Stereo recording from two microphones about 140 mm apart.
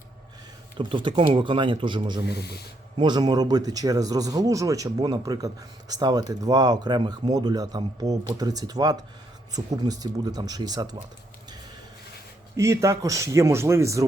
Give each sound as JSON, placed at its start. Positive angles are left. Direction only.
{"t": 0.8, "sound": "speech", "side_deg": -35}
{"t": 12.5, "sound": "speech", "side_deg": -20}